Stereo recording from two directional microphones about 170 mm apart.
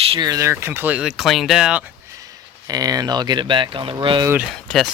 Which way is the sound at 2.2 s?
20° right (ahead or behind).